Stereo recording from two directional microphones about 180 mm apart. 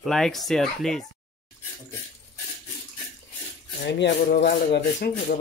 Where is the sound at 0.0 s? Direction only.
Centre (ahead or behind).